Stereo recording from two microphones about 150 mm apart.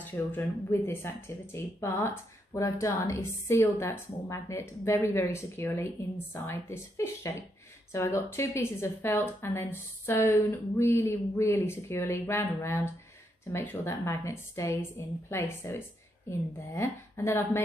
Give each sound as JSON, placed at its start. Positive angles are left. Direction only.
{"t": 0.0, "sound": "a woman's voice", "side_deg": 10}